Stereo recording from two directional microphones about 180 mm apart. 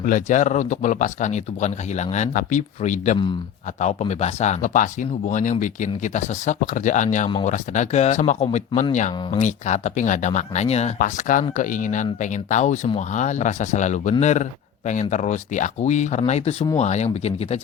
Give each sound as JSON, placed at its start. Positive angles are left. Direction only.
{"t": 0.0, "sound": "speech", "side_deg": 45}